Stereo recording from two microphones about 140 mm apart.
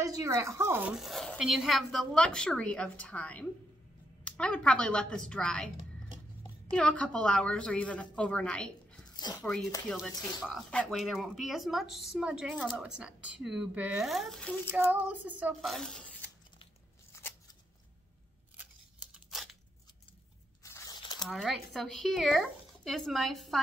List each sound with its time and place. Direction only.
0.0 s speech: 25° right (ahead or behind); by 5.7 s 5° left (ahead or behind)
6.7 s a woman's voice: 10° left (ahead or behind)
9.1 s speech: 30° left (ahead or behind)
9.4 s speech: 5° left (ahead or behind)
14.7 s a sound: 15° right (ahead or behind)
15.6 s speech: centre (ahead or behind)
19.1 s tearing: centre (ahead or behind)
20.6 s tearing: 20° left (ahead or behind)
21.0 s a sound: 30° left (ahead or behind)
21.3 s speech: centre (ahead or behind)